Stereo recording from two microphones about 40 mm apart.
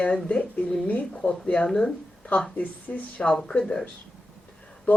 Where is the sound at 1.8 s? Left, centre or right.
Left.